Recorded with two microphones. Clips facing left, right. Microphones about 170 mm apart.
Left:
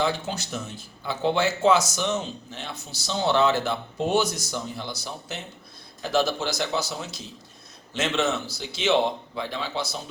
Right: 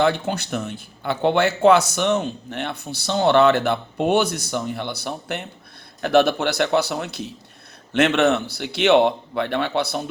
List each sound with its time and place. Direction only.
0.0 s speech: 60° right (ahead or behind)